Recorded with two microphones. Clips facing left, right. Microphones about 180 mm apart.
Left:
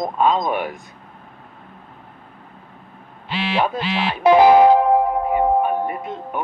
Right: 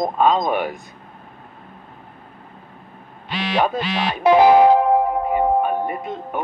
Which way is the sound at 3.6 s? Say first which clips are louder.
Right 2 dB; 45° right (ahead or behind).